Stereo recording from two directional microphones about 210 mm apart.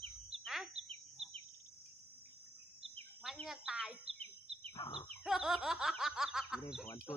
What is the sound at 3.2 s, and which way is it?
Cricket, centre (ahead or behind).